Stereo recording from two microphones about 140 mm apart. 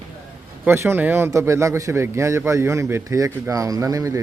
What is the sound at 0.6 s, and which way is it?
Speech, 15° right (ahead or behind).